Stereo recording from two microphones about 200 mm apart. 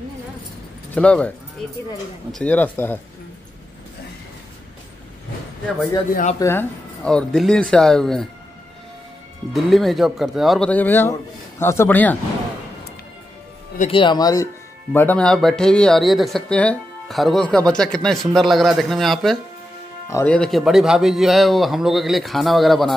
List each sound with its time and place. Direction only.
0.9 s speech: 5° left (ahead or behind)
2.3 s speech: 5° left (ahead or behind)
6.4 s speech: 10° left (ahead or behind)
9.5 s speech: centre (ahead or behind)
13.7 s speech: 25° left (ahead or behind)
14.9 s speech: 5° left (ahead or behind)
20.1 s speech: 15° left (ahead or behind)
20.3 s speech: centre (ahead or behind)